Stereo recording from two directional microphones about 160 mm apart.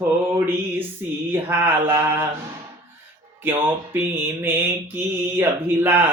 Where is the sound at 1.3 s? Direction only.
15° right (ahead or behind).